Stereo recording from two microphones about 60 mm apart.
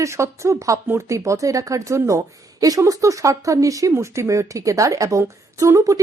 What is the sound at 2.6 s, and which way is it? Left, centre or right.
Speech, right.